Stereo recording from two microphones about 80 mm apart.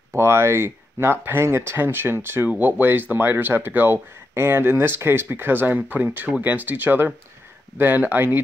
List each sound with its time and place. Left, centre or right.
0.1 s speech: right